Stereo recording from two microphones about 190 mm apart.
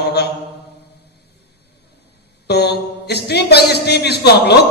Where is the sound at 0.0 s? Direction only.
60° left (ahead or behind).